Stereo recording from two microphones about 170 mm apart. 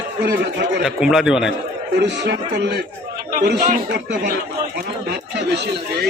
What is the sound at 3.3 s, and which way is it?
Speech, 60° right (ahead or behind).